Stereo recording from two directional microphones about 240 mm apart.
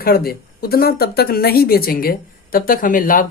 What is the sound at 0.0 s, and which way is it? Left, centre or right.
Speech, left.